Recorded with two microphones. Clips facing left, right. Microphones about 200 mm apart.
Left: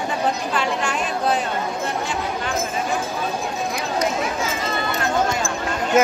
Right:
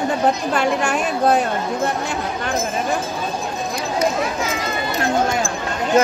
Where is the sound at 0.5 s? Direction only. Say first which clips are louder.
Right 4 dB; 50° right (ahead or behind).